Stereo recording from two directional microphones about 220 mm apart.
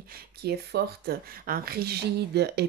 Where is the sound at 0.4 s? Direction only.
45° right (ahead or behind).